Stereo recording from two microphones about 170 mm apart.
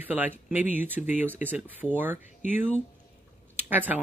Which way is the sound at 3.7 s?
10° right (ahead or behind).